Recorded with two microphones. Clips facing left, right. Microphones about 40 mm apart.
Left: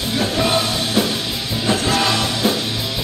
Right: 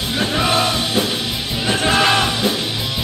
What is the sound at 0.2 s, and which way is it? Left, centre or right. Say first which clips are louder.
Music: right 1 dB; right.